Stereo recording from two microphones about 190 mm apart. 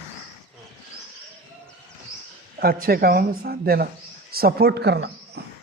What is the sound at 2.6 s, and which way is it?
A man's voice, 55° right (ahead or behind).